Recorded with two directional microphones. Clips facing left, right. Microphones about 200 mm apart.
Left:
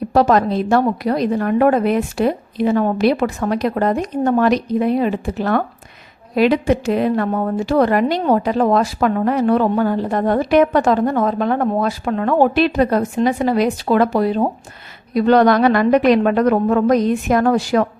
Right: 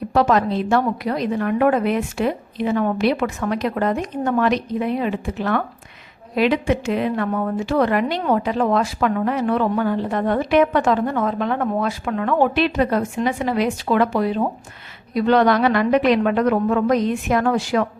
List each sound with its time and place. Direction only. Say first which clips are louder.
0.1 s a woman's voice: left 3 dB; 40° left (ahead or behind)